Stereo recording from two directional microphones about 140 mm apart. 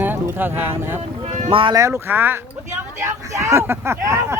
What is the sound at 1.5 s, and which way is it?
Speech, 40° right (ahead or behind).